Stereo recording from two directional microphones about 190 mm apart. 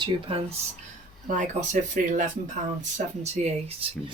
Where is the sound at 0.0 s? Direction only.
30° right (ahead or behind).